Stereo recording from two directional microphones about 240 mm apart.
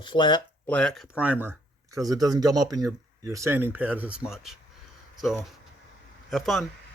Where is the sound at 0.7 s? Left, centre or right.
Centre.